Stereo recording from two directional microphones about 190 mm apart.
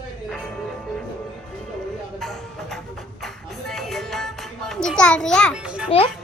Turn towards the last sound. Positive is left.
turn(degrees=-5)  # may be behind; listen again after turning